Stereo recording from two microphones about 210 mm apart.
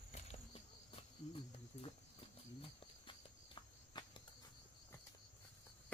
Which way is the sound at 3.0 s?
25° left (ahead or behind).